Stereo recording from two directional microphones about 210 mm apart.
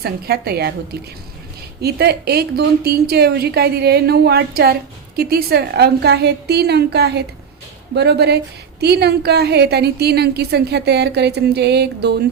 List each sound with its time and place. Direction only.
0.0 s a woman's voice: 50° right (ahead or behind)
1.8 s a woman's voice: 50° right (ahead or behind)